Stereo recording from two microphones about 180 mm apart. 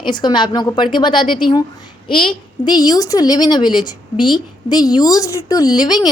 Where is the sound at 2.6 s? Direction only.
20° left (ahead or behind).